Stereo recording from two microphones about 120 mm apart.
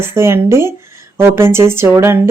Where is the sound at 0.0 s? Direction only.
20° right (ahead or behind).